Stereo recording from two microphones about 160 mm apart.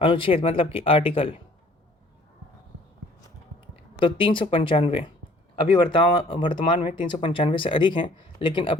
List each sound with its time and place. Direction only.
0.0 s speech: 35° left (ahead or behind)
4.0 s speech: 30° left (ahead or behind)